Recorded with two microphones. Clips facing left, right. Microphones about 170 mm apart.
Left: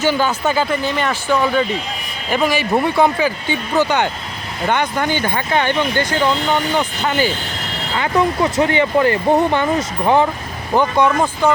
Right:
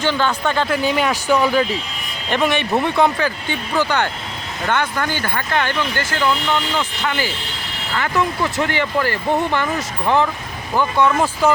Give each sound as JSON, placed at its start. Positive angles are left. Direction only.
{"t": 0.0, "sound": "speech", "side_deg": 10}
{"t": 0.9, "sound": "speech", "side_deg": -10}
{"t": 7.9, "sound": "speech", "side_deg": 20}
{"t": 11.4, "sound": "speech", "side_deg": -5}